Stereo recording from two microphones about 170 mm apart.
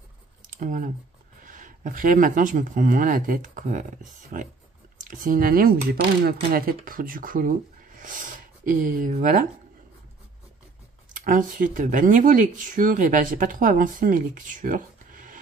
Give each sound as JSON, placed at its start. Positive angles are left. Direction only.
{"t": 0.6, "sound": "speech", "side_deg": -50}
{"t": 11.1, "sound": "speech", "side_deg": -50}